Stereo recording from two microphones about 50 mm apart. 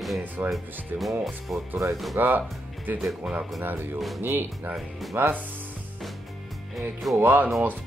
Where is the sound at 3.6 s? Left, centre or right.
Right.